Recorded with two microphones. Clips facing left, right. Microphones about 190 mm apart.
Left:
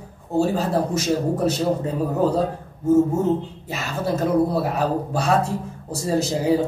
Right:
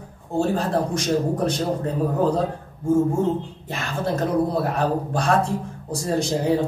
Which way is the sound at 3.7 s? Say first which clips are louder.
Left 1 dB; 5° left (ahead or behind).